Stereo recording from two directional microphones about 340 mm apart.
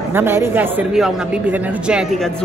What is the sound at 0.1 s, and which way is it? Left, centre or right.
A man's voice, centre.